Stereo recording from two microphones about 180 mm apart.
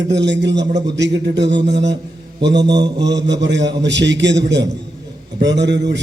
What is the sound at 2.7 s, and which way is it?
Mantra, 25° right (ahead or behind).